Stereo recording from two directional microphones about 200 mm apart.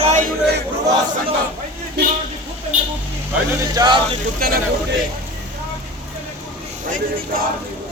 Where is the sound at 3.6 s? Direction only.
20° right (ahead or behind).